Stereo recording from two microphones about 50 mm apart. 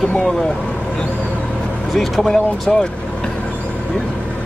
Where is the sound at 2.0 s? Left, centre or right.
Centre.